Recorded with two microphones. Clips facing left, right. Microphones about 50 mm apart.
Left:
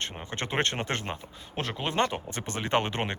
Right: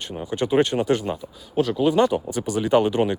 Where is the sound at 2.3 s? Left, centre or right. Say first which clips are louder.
Right 8 dB; left.